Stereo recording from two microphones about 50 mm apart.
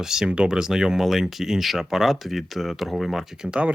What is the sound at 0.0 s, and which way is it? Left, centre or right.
Speech, centre.